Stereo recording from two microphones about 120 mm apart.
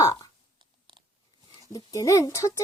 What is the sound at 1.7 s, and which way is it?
Speech, 30° left (ahead or behind).